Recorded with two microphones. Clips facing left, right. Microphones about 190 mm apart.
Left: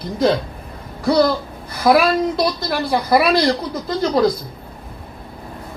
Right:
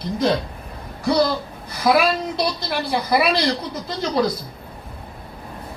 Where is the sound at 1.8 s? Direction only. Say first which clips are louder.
Left 4 dB; 50° left (ahead or behind).